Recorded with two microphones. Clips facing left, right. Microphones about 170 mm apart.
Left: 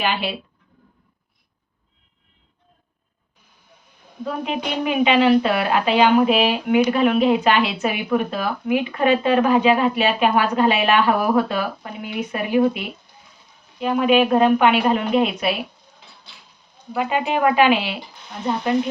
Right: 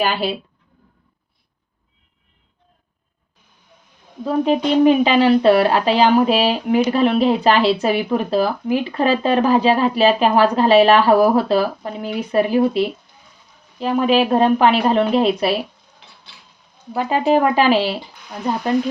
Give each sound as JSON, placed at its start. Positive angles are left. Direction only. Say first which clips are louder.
{"t": 0.0, "sound": "speech", "louder": "right 4 dB", "side_deg": -40}
{"t": 4.3, "sound": "speech", "louder": "right 8 dB", "side_deg": -35}
{"t": 16.9, "sound": "speech", "louder": "right 5 dB", "side_deg": -35}